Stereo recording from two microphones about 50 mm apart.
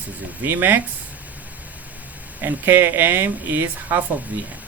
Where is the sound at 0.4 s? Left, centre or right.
Right.